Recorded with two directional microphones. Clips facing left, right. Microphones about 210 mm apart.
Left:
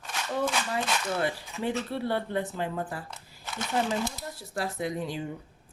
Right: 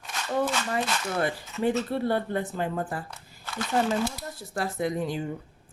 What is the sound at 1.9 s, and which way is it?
Speech, 50° right (ahead or behind).